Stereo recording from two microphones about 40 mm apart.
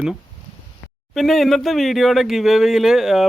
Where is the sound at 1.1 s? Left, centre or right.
Centre.